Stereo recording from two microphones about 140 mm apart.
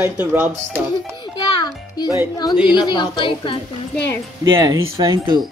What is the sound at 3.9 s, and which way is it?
Speech, 15° left (ahead or behind).